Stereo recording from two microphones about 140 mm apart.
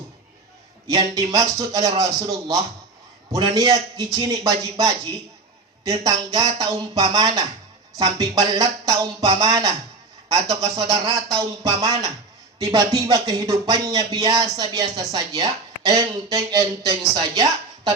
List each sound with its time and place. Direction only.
0.9 s a woman's voice: 25° right (ahead or behind)